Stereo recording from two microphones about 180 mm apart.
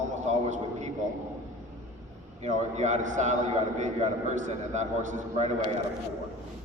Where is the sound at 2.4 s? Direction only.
40° right (ahead or behind).